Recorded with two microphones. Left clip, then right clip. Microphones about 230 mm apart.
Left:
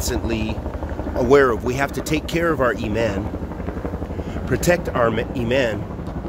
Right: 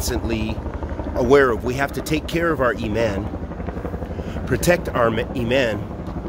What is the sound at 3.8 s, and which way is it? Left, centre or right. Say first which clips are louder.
Vehicle: left 2 dB; left.